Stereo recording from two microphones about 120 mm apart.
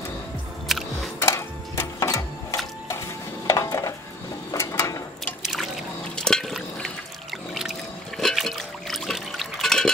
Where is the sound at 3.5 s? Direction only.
25° left (ahead or behind).